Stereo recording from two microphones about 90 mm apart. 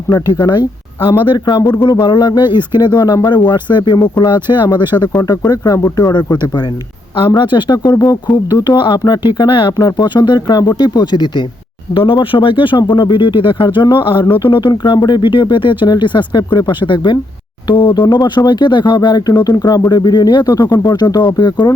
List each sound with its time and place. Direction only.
0.3 s speech: 55° left (ahead or behind)
1.2 s speech: 65° left (ahead or behind)
5.5 s speech: 40° left (ahead or behind)
7.2 s speech: 65° left (ahead or behind); by 8.2 s 40° left (ahead or behind)
8.3 s speech: 55° left (ahead or behind)
11.9 s speech: 75° left (ahead or behind)
14.5 s speech: 60° left (ahead or behind)